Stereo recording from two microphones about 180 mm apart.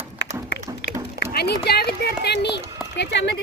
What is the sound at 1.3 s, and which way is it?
Speech, 60° left (ahead or behind).